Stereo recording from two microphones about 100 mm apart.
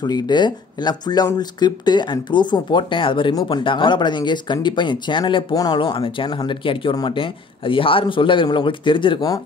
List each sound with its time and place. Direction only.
0.0 s speech: 45° left (ahead or behind)
5.8 s speech: 55° left (ahead or behind)